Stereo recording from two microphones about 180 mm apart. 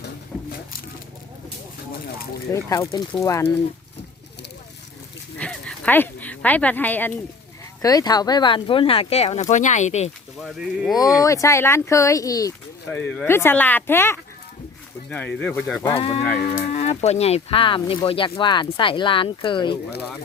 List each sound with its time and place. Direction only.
0.3 s a sound: 15° left (ahead or behind)
2.6 s speech: 20° left (ahead or behind)
5.4 s a sound: 5° left (ahead or behind)
7.8 s speech: 20° left (ahead or behind); by 10.1 s 40° left (ahead or behind)
10.4 s speech: centre (ahead or behind)
10.9 s speech: 20° left (ahead or behind)
12.9 s speech: 5° left (ahead or behind)
15.4 s speech: 5° left (ahead or behind)
15.9 s speech: 35° left (ahead or behind)